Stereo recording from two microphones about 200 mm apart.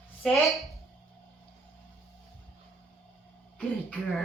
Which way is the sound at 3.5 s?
5° left (ahead or behind).